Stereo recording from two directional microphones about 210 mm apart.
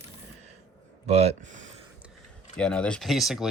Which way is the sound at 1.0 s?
30° right (ahead or behind).